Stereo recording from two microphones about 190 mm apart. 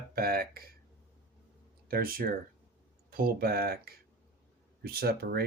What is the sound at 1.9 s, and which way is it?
Speech, 50° right (ahead or behind).